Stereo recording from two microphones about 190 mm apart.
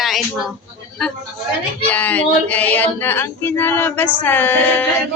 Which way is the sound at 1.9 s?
10° left (ahead or behind).